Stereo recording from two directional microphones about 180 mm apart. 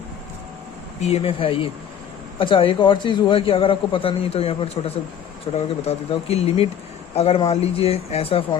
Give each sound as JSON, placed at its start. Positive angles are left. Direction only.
{"t": 1.0, "sound": "a man's voice", "side_deg": 35}